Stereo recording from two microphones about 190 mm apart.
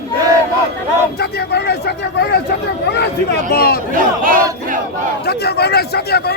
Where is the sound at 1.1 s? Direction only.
60° left (ahead or behind).